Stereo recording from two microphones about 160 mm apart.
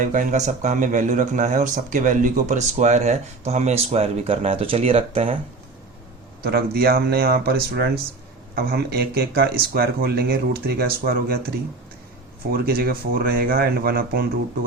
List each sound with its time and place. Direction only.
0.0 s speech: 55° right (ahead or behind); by 5.4 s 40° right (ahead or behind)
6.4 s speech: 75° right (ahead or behind)